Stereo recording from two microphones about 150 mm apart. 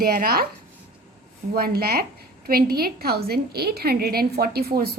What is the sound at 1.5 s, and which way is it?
A woman's voice, 90° right.